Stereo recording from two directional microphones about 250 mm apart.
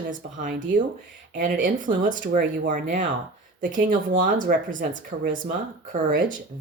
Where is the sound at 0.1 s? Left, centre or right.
Right.